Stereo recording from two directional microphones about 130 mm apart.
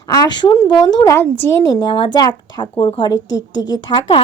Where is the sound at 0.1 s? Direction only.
30° left (ahead or behind).